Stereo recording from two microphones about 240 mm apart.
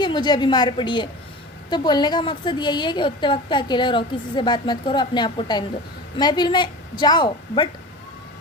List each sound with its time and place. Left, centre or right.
0.0 s a woman's voice: centre